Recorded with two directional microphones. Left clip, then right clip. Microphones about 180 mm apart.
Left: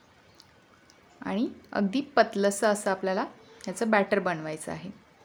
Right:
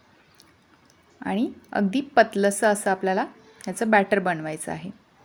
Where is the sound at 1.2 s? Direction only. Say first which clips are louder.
Right 4 dB; 15° right (ahead or behind).